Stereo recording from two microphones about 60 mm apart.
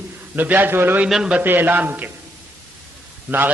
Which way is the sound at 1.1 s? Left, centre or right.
Centre.